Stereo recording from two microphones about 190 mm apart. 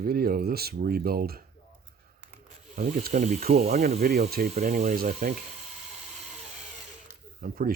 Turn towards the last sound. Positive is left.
turn(degrees=-50)  # may be behind; listen again after turning